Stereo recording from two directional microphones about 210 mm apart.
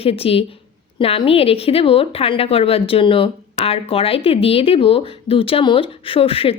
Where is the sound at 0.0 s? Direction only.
30° left (ahead or behind).